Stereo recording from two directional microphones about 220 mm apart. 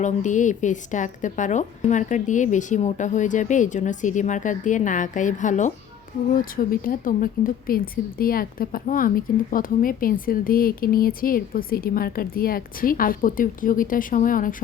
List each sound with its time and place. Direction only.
0.0 s speech: 35° left (ahead or behind)